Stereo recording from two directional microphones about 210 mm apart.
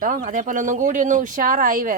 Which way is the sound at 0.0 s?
40° right (ahead or behind).